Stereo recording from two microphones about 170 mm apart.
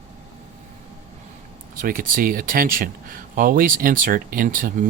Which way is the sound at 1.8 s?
55° right (ahead or behind).